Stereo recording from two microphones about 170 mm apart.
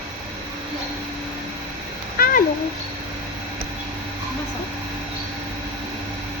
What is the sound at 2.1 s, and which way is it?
Cat, 60° left (ahead or behind).